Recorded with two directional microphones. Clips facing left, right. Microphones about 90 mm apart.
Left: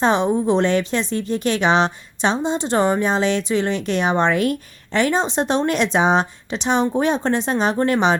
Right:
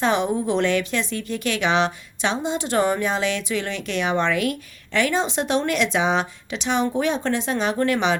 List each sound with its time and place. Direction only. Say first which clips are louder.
0.0 s a woman's voice: left 4 dB; 30° left (ahead or behind)